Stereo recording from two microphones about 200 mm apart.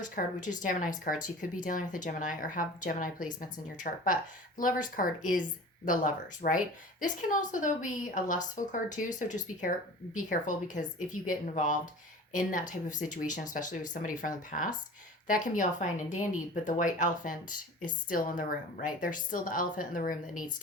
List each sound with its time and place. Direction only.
0.0 s a woman's voice: 40° left (ahead or behind)